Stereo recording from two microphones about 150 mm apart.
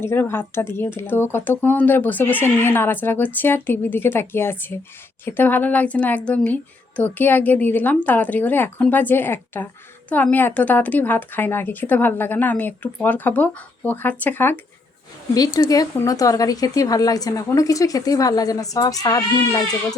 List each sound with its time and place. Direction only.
0.0 s speech: 15° left (ahead or behind)
15.7 s a woman's voice: 25° left (ahead or behind)